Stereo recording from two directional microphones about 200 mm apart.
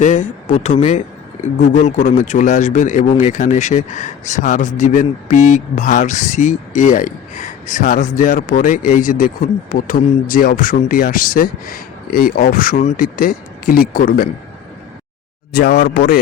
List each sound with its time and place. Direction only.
0.0 s speech: 35° left (ahead or behind)
15.5 s speech: 55° left (ahead or behind)